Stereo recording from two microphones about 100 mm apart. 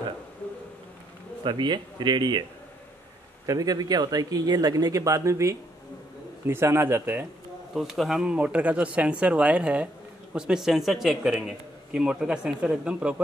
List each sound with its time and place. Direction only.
1.4 s speech: 50° right (ahead or behind)
3.4 s speech: 40° right (ahead or behind); by 7.2 s 20° right (ahead or behind)
7.7 s a man's voice: 5° right (ahead or behind)